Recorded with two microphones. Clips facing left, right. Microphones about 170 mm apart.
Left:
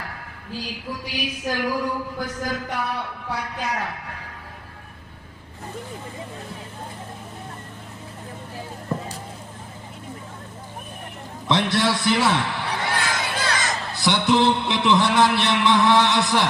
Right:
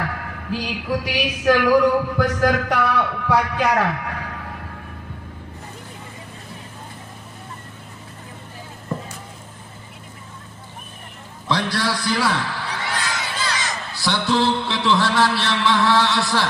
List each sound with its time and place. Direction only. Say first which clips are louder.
0.0 s a sound: right 9 dB; 80° right
11.4 s a man's voice: left 2 dB; 25° left (ahead or behind)
12.9 s crow: left 2 dB; 50° left (ahead or behind)
13.9 s a man's voice: left 1 dB; 20° left (ahead or behind)